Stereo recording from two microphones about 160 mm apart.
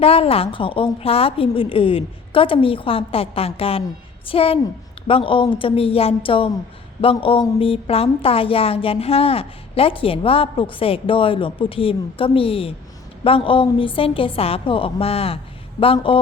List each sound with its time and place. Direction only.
0.0 s a woman's voice: 35° left (ahead or behind)